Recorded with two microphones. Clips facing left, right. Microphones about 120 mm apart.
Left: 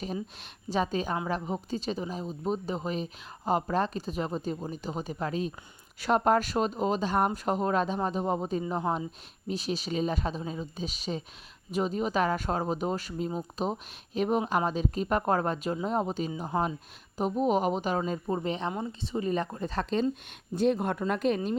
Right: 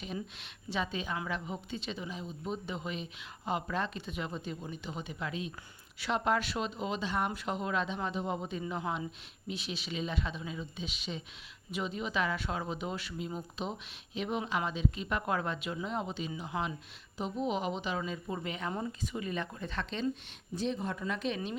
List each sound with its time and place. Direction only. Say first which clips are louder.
0.7 s a woman's voice: left 7 dB; 40° left (ahead or behind)
20.6 s speech: left 8 dB; 55° left (ahead or behind)